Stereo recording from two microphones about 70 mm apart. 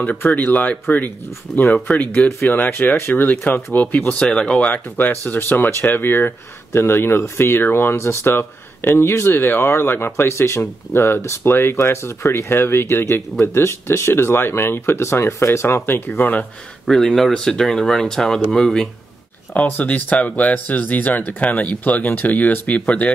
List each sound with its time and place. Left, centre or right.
0.2 s speech: left
4.1 s speech: centre
16.8 s speech: centre
19.5 s speech: left